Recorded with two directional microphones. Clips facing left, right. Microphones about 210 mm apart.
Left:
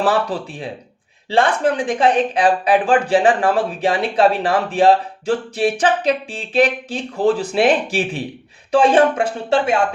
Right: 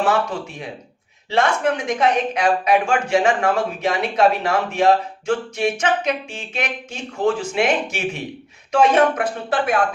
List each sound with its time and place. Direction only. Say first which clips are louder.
0.0 s speech: left 2 dB; 35° left (ahead or behind)